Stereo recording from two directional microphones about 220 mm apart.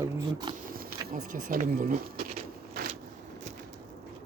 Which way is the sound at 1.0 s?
35° right (ahead or behind).